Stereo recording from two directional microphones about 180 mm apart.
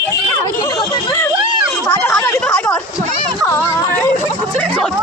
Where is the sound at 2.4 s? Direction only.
5° left (ahead or behind).